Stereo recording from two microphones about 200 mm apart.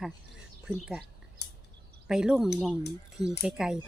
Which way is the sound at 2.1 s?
5° right (ahead or behind).